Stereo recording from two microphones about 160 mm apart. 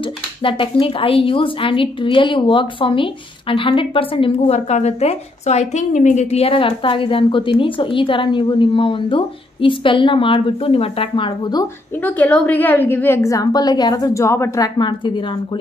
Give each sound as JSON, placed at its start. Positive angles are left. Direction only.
{"t": 0.4, "sound": "a woman's voice", "side_deg": 35}
{"t": 12.0, "sound": "a woman's voice", "side_deg": 10}